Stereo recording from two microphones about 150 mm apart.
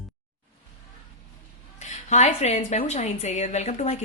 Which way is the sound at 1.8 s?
50° left (ahead or behind).